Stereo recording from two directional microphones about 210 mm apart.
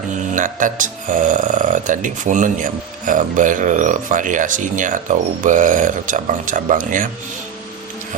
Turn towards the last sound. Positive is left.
turn(degrees=-40)  # may be behind; listen again after turning